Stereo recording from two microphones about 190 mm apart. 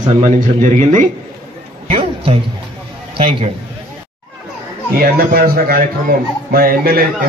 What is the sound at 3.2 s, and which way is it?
Speech, 30° right (ahead or behind).